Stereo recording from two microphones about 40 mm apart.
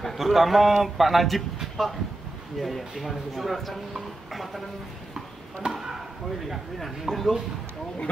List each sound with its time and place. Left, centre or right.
0.2 s a man's voice: centre
5.6 s speech: right
6.4 s a man's voice: centre